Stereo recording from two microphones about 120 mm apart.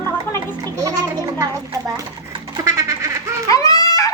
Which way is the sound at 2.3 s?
30° right (ahead or behind).